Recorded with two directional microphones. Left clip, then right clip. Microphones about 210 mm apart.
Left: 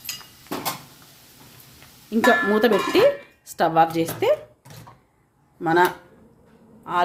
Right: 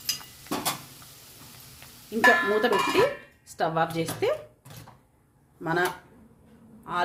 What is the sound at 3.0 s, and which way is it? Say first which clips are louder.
Speech: left 6 dB; 35° left (ahead or behind).